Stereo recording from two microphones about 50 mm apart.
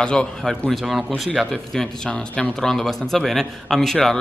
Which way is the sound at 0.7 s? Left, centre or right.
Centre.